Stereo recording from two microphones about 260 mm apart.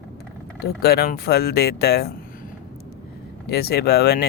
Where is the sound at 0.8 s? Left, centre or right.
Left.